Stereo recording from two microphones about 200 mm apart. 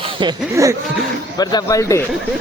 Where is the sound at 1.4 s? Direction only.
20° left (ahead or behind).